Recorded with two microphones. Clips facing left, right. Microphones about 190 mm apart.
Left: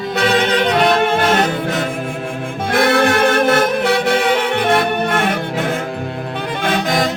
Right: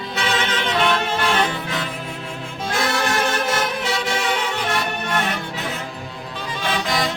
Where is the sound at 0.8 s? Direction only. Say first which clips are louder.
Left 4 dB; 45° left (ahead or behind).